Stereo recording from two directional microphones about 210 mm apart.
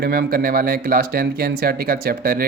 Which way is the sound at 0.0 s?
45° right (ahead or behind).